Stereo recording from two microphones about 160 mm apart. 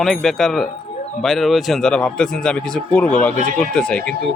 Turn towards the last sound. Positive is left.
turn(degrees=5)  # may be behind; listen again after turning